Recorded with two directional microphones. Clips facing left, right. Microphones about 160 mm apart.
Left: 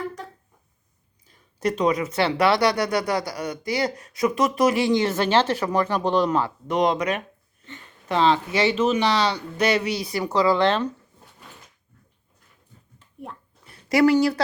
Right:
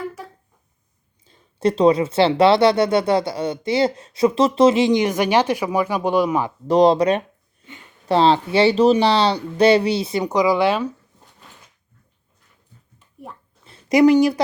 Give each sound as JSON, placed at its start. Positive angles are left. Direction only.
{"t": 0.2, "sound": "a sound", "side_deg": -5}
{"t": 1.2, "sound": "speech", "side_deg": -25}
{"t": 6.7, "sound": "speech", "side_deg": -35}
{"t": 13.7, "sound": "speech", "side_deg": -20}